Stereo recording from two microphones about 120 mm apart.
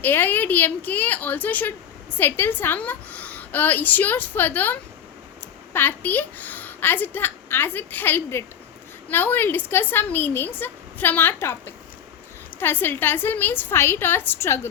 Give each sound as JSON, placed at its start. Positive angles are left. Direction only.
{"t": 0.0, "sound": "a woman's voice", "side_deg": 15}